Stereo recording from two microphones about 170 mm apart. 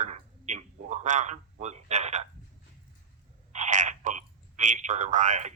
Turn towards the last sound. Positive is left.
turn(degrees=-45)  # may be behind; listen again after turning